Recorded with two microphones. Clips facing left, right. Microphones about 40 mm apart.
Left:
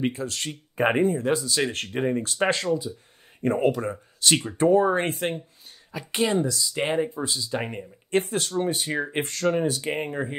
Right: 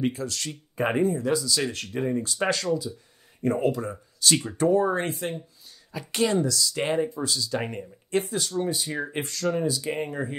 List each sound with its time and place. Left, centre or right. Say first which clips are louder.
0.0 s speech: left 1 dB; left
4.4 s speech: left 3 dB; left
5.1 s speech: left 3 dB; left
5.9 s speech: even; left
7.6 s speech: even; centre
8.1 s speech: left 2 dB; left